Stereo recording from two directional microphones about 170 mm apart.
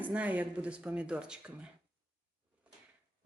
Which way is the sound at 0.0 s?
10° right (ahead or behind).